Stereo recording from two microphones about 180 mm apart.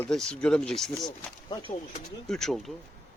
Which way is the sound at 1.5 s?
25° left (ahead or behind).